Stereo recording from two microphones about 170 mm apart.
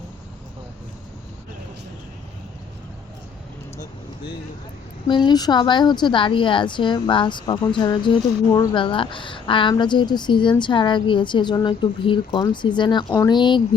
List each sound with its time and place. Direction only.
5.0 s a woman's voice: 25° left (ahead or behind)